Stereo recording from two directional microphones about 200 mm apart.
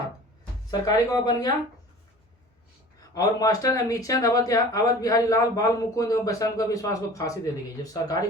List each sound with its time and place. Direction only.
0.7 s speech: 20° left (ahead or behind)
3.0 s speech: 20° left (ahead or behind)